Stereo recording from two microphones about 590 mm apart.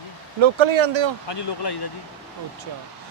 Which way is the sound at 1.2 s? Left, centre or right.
Left.